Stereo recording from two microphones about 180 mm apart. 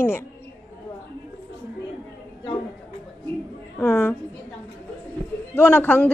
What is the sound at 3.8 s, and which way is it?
Speech, 10° left (ahead or behind).